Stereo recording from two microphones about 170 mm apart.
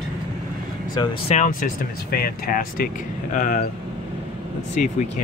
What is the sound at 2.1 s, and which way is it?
Speech, 60° left (ahead or behind).